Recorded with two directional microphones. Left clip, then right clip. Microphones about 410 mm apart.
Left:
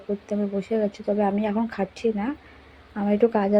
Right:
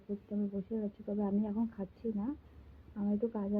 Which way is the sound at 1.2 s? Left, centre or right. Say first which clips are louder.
Left 11 dB; centre.